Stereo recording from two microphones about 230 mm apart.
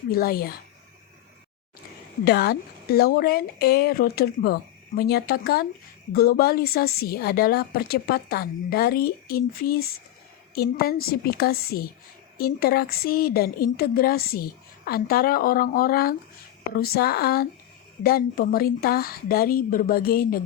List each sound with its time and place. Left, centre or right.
0.1 s a woman's voice: left
2.2 s a woman's voice: left